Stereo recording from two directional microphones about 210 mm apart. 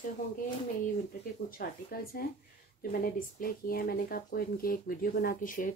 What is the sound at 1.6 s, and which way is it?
Speech, 45° left (ahead or behind).